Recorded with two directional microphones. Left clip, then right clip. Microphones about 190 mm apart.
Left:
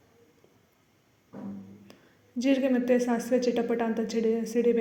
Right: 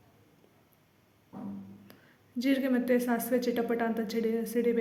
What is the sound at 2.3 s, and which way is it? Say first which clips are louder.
A woman's voice: left 3 dB; 30° right (ahead or behind).